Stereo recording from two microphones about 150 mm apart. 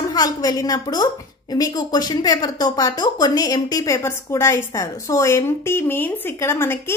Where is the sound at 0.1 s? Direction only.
25° left (ahead or behind).